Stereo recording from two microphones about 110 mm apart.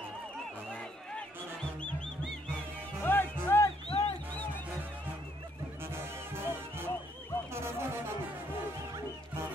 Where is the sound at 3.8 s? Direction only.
65° left (ahead or behind).